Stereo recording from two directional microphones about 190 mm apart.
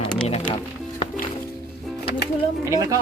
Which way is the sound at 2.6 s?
15° right (ahead or behind).